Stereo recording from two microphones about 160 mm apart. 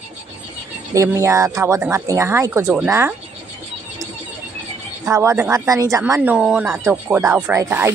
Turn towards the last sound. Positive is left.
turn(degrees=-15)  # may be behind; listen again after turning